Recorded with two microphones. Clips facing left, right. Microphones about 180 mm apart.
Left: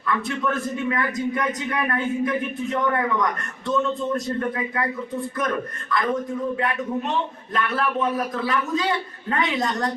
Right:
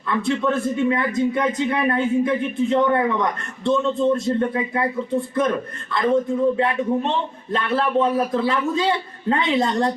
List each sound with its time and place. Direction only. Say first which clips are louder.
0.1 s a man's voice: right 4 dB; 25° right (ahead or behind)
5.9 s a man's voice: right 5 dB; 25° right (ahead or behind)